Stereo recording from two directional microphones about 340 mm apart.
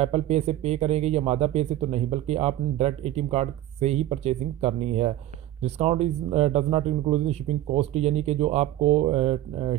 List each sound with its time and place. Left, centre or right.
0.0 s speech: centre